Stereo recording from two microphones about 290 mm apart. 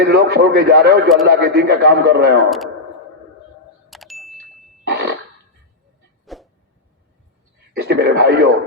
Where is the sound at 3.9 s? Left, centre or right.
Centre.